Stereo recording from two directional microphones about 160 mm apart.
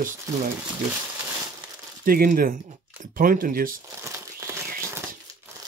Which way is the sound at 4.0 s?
15° right (ahead or behind).